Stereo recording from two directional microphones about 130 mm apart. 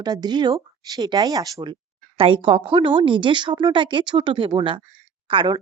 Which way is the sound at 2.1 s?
45° right (ahead or behind).